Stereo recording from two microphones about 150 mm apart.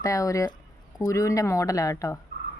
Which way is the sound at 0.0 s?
20° left (ahead or behind).